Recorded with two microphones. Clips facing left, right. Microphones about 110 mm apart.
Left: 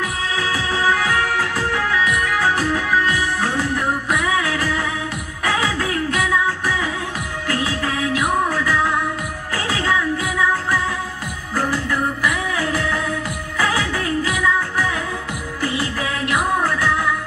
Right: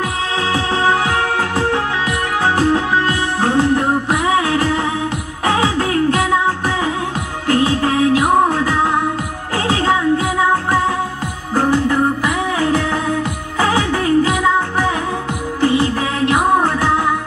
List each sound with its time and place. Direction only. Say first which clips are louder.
0.4 s music: right 4 dB; 25° right (ahead or behind)
11.5 s music: right 7 dB; 25° right (ahead or behind)